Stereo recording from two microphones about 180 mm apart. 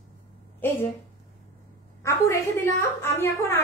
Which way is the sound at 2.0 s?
15° left (ahead or behind).